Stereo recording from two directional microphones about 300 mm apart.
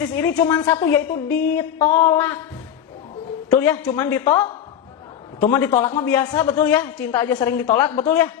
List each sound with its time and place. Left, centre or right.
0.3 s speech: centre
3.5 s speech: centre
5.5 s speech: centre
7.6 s speech: left
8.0 s speech: centre